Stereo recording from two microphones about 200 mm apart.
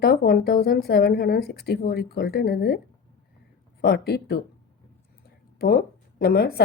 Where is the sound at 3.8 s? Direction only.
50° left (ahead or behind).